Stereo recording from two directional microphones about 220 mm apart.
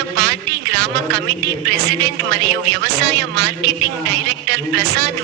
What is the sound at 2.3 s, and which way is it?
A man's voice, 50° right (ahead or behind).